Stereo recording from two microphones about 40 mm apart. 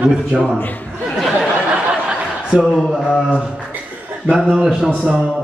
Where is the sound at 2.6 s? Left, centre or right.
Centre.